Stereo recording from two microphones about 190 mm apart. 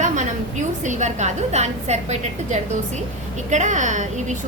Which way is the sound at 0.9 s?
40° right (ahead or behind).